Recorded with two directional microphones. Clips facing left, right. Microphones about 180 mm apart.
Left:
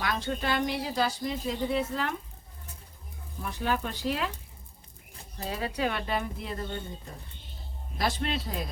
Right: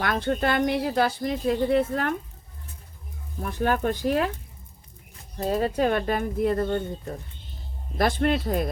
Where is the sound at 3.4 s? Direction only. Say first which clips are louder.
Right 6 dB; 50° right (ahead or behind).